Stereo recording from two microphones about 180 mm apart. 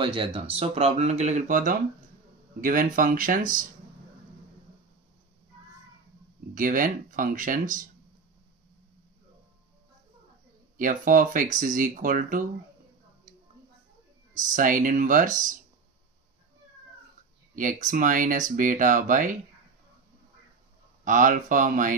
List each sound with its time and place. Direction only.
0.0 s speech: 30° right (ahead or behind); by 3.6 s 50° right (ahead or behind)
6.5 s speech: 50° right (ahead or behind)
10.8 s speech: 50° right (ahead or behind)
14.3 s speech: 45° right (ahead or behind)
17.6 s speech: 45° right (ahead or behind)
21.0 s speech: 45° right (ahead or behind)